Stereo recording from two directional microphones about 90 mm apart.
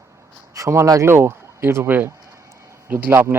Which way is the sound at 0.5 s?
35° right (ahead or behind).